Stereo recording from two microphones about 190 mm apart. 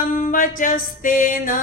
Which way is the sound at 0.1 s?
45° left (ahead or behind).